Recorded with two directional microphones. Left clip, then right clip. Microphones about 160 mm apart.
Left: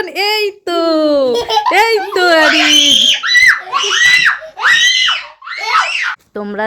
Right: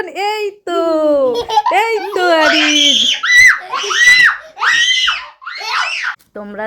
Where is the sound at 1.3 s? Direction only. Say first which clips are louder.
Left 1 dB; 50° left (ahead or behind).